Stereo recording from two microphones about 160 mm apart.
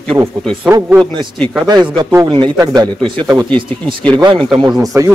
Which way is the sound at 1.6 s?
25° right (ahead or behind).